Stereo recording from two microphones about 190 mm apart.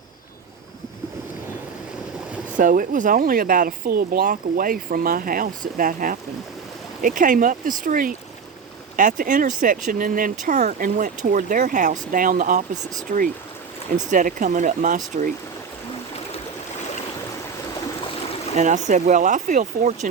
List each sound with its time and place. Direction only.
2.6 s speech: 45° right (ahead or behind)
18.5 s speech: 40° right (ahead or behind)